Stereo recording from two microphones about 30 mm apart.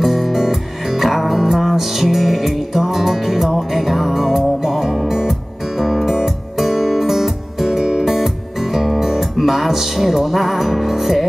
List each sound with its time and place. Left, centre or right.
0.0 s music: centre
7.8 s music: right
8.7 s music: centre